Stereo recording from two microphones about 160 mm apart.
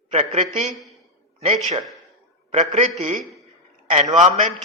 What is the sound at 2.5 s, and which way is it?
Speech, 45° right (ahead or behind).